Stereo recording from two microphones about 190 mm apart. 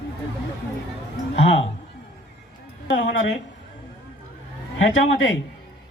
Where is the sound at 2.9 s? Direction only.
85° left.